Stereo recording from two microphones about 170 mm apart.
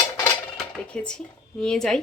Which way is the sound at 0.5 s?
5° left (ahead or behind).